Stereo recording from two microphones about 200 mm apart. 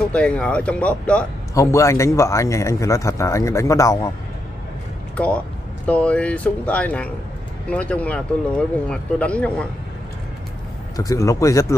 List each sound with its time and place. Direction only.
0.1 s a man's voice: 5° left (ahead or behind)
5.1 s a man's voice: 5° left (ahead or behind)
11.0 s a man's voice: 15° left (ahead or behind)